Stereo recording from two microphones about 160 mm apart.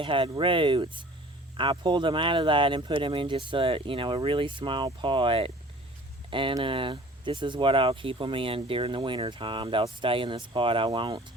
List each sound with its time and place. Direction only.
0.0 s speech: 35° right (ahead or behind)